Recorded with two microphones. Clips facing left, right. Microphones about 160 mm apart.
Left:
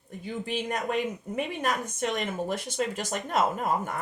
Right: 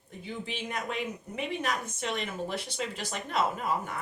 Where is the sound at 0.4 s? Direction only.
45° left (ahead or behind).